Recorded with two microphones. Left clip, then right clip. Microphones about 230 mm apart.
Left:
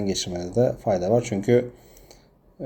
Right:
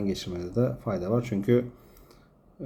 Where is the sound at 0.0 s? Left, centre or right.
Centre.